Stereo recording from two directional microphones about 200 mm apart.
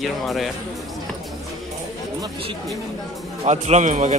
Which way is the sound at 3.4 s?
35° right (ahead or behind).